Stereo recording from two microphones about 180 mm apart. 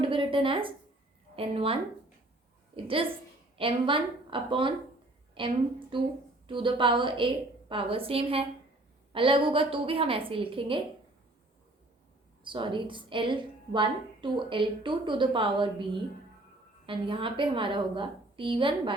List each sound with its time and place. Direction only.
0.0 s a woman's voice: 30° right (ahead or behind)
12.5 s a woman's voice: 25° right (ahead or behind)